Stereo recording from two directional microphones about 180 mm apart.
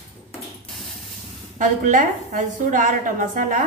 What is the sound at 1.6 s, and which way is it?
A woman's voice, 45° right (ahead or behind).